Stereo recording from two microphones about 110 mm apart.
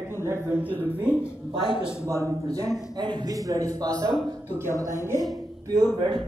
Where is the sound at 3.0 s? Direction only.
40° right (ahead or behind).